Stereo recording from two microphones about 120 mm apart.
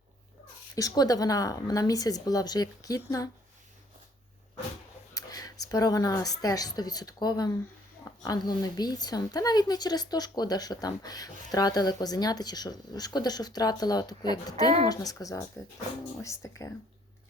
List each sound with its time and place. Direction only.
0.8 s a woman's voice: 30° left (ahead or behind)
5.1 s a woman's voice: 30° left (ahead or behind)